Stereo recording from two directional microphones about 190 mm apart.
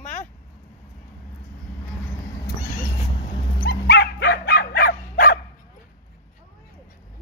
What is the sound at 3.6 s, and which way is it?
Dog, 55° left (ahead or behind).